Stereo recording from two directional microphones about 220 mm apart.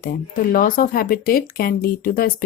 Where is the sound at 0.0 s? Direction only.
40° left (ahead or behind).